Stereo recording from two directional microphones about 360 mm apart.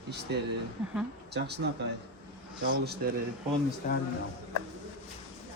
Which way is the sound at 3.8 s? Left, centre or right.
Left.